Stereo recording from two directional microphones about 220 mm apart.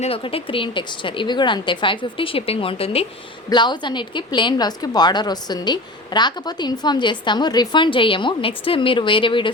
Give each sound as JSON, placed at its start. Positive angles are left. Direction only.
{"t": 0.0, "sound": "a woman's voice", "side_deg": 25}